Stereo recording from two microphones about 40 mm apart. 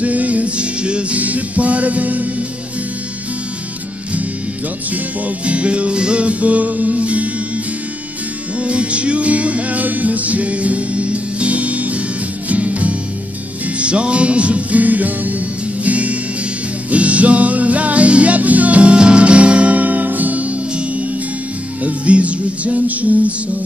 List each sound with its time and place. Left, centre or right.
0.0 s music: right
1.2 s music: right
5.4 s music: right
8.5 s music: right
21.8 s music: right